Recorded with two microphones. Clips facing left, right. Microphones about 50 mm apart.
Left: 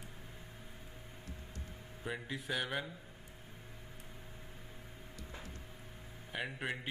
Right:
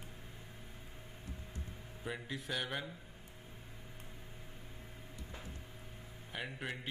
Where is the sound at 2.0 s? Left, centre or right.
Centre.